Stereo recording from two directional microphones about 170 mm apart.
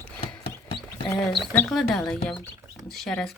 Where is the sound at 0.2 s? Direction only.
30° left (ahead or behind).